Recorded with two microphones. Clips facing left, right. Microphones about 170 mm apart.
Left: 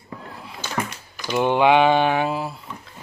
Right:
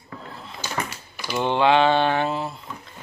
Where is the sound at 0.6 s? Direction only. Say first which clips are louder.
Left 2 dB; 5° right (ahead or behind).